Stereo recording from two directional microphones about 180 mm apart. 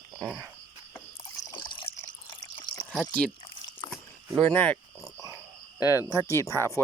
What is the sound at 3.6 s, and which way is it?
Biting, 25° left (ahead or behind).